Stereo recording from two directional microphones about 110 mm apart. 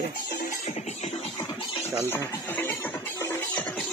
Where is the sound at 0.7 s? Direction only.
85° left.